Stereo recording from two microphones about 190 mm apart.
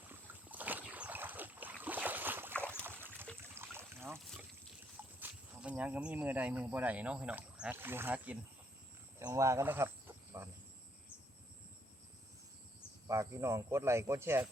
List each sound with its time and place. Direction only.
0.1 s boat: 10° right (ahead or behind)
2.5 s boat: 5° left (ahead or behind)
3.5 s trickle: 10° right (ahead or behind)
4.2 s boat: centre (ahead or behind)
5.2 s speech: 5° right (ahead or behind)
13.1 s speech: 15° right (ahead or behind)